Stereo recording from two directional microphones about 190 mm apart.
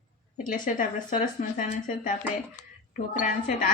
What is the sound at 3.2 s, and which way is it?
Speech, 45° left (ahead or behind).